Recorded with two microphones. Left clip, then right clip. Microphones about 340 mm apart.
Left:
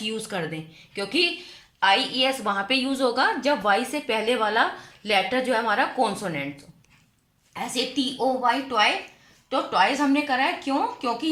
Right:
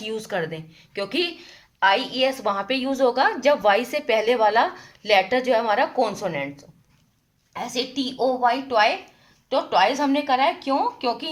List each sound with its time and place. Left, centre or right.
0.0 s a woman's voice: right
7.5 s a woman's voice: right